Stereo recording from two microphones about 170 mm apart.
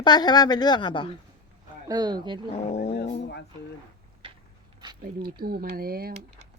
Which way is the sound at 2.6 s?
40° left (ahead or behind).